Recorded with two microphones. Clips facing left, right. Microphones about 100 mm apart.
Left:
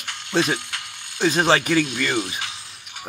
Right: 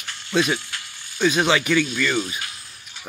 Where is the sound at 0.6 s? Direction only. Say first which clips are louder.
Left 2 dB; 70° left (ahead or behind).